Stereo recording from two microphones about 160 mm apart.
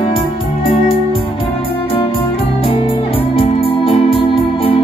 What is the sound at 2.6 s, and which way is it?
Music, 35° left (ahead or behind).